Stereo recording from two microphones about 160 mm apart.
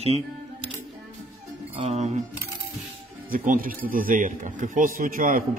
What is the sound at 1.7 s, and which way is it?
Speech, 40° right (ahead or behind).